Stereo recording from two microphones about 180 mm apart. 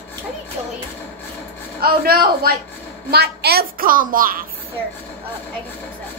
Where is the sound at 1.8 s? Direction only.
60° right (ahead or behind).